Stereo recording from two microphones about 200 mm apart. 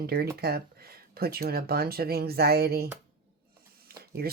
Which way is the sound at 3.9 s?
50° right (ahead or behind).